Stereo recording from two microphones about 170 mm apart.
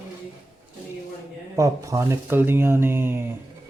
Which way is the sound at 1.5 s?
20° right (ahead or behind).